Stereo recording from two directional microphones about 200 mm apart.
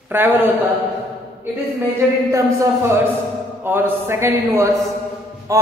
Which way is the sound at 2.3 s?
15° right (ahead or behind).